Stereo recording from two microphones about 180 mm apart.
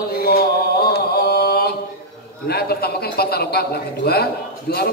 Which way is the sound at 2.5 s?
60° left (ahead or behind).